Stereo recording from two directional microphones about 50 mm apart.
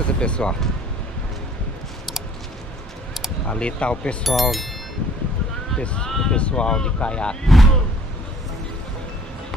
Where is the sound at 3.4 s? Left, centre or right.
Left.